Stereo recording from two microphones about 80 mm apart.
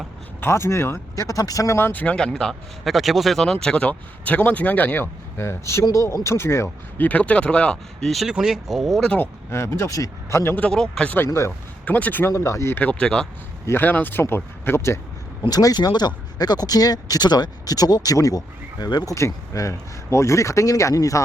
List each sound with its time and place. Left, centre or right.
0.4 s speech: left
1.9 s speech: left
2.1 s speech: centre; by 7.1 s left
7.1 s speech: centre
8.1 s speech: centre
9.1 s speech: left
10.6 s speech: centre
11.3 s speech: left
11.9 s speech: centre
12.3 s speech: left
12.8 s speech: centre
13.7 s speech: left
15.4 s speech: left
19.1 s speech: left